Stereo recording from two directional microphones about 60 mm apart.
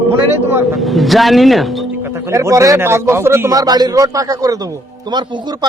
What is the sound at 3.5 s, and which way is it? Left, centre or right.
A man's voice, right.